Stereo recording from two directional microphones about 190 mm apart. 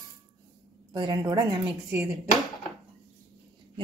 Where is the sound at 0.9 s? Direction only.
25° right (ahead or behind).